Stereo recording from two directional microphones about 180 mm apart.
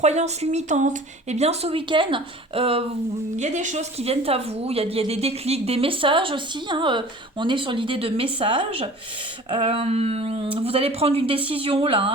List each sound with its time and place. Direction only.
0.0 s a woman's voice: 40° right (ahead or behind)